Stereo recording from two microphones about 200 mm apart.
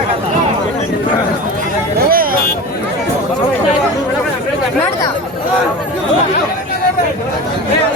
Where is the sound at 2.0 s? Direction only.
45° right (ahead or behind).